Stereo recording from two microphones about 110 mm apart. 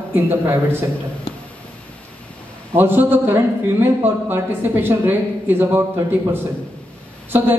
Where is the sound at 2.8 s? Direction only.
20° right (ahead or behind).